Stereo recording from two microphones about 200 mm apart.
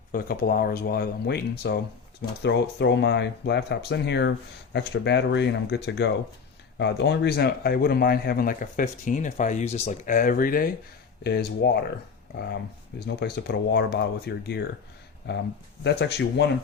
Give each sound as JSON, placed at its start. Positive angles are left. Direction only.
{"t": 0.1, "sound": "a man's voice", "side_deg": 50}
{"t": 13.1, "sound": "speech", "side_deg": 55}